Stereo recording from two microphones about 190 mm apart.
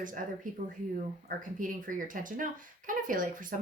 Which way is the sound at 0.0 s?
45° right (ahead or behind).